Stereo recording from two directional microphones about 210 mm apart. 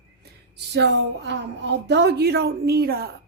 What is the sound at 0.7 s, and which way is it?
A woman's voice, 55° right (ahead or behind).